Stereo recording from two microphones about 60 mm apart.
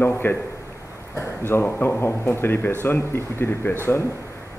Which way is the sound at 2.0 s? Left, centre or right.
Left.